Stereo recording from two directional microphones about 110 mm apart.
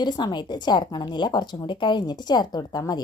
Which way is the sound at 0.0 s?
40° left (ahead or behind).